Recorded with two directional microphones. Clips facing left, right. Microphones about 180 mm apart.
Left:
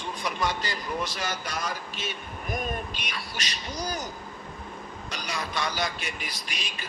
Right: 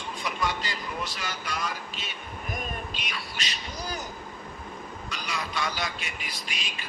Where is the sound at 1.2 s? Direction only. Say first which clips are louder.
Left 2 dB; 45° left (ahead or behind).